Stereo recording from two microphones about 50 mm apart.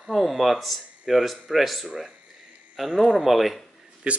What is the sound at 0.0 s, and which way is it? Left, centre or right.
Speech, centre.